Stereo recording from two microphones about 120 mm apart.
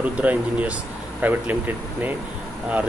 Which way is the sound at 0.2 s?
10° right (ahead or behind).